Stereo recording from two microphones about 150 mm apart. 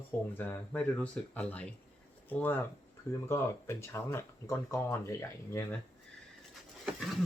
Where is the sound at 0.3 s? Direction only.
15° left (ahead or behind).